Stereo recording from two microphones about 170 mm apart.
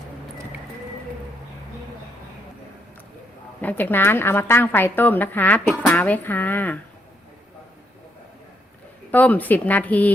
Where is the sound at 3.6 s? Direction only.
10° left (ahead or behind).